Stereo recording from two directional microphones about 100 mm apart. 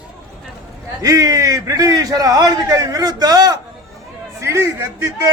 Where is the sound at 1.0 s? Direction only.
35° right (ahead or behind).